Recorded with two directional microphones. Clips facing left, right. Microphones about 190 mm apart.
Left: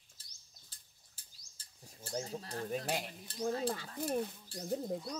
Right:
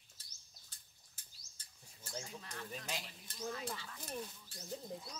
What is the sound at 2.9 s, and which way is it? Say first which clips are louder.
Speech: left 8 dB; 55° left (ahead or behind).